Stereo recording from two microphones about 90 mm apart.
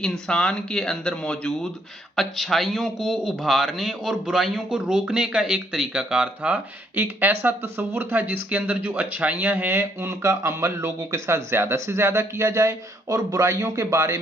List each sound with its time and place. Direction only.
0.0 s a man's voice: 10° left (ahead or behind); by 14.2 s 35° right (ahead or behind)